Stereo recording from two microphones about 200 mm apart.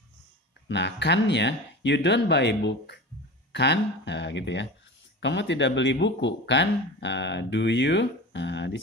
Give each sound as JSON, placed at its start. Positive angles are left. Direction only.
{"t": 0.7, "sound": "speech", "side_deg": 60}